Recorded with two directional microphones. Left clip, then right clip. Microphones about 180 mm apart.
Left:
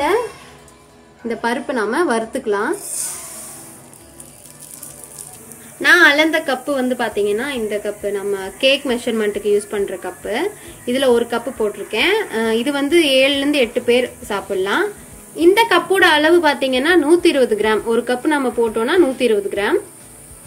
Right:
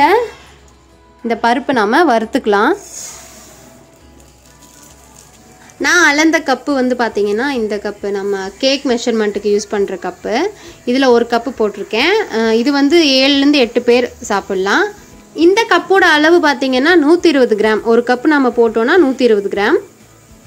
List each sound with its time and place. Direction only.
1.2 s speech: 45° right (ahead or behind)
5.8 s a woman's voice: 40° right (ahead or behind)